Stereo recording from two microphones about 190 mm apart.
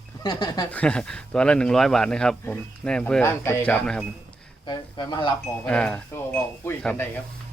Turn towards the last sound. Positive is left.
turn(degrees=10)  # may be behind; listen again after turning